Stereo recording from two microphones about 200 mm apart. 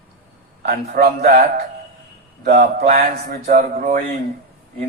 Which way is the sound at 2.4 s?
50° right (ahead or behind).